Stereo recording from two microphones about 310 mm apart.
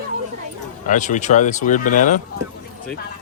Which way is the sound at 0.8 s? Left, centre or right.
Left.